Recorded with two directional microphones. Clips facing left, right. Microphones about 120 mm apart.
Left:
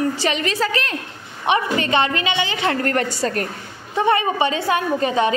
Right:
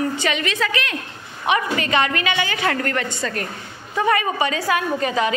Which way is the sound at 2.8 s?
40° left (ahead or behind).